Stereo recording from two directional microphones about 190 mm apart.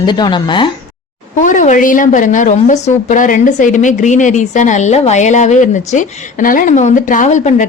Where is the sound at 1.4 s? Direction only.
40° left (ahead or behind).